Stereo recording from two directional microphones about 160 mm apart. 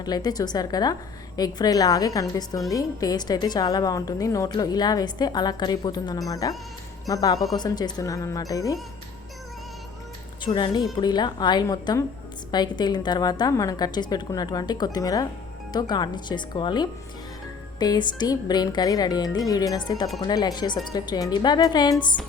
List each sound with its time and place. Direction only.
0.0 s a woman's voice: 25° left (ahead or behind)
10.4 s a woman's voice: 30° left (ahead or behind)